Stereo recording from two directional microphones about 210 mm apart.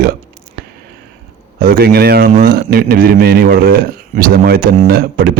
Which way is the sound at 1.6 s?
45° right (ahead or behind).